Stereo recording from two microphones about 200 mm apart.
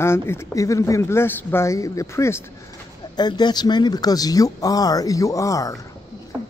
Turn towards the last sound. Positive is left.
turn(degrees=-15)  # may be behind; listen again after turning